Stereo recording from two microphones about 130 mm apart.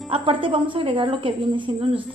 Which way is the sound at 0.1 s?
40° right (ahead or behind).